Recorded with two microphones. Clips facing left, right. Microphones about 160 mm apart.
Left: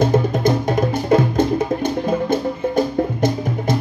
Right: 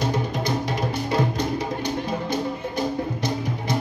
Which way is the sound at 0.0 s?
50° left (ahead or behind).